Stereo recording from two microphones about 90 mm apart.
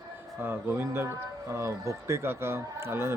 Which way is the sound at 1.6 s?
30° right (ahead or behind).